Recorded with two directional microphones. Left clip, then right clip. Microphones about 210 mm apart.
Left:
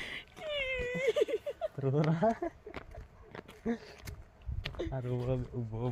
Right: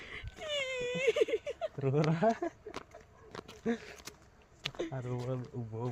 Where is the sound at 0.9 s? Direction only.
10° left (ahead or behind).